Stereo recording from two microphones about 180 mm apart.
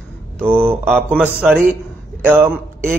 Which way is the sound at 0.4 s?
10° right (ahead or behind).